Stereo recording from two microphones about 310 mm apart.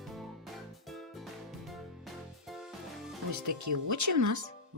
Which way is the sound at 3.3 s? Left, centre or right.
Right.